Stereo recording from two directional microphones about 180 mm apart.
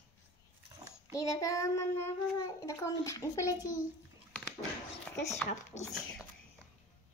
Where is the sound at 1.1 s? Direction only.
15° left (ahead or behind).